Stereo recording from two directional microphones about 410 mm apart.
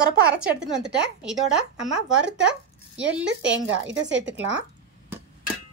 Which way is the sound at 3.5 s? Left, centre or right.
Right.